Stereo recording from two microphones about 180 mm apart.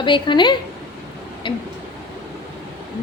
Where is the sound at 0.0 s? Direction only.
25° left (ahead or behind).